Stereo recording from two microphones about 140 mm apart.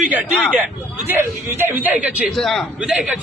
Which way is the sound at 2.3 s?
Centre (ahead or behind).